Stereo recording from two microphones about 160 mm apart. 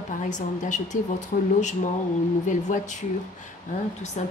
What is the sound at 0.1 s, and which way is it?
A woman's voice, 50° left (ahead or behind).